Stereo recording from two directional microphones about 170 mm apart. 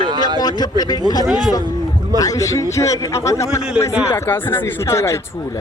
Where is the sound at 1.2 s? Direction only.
Centre (ahead or behind).